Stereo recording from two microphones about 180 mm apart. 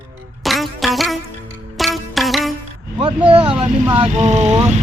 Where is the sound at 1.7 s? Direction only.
Centre (ahead or behind).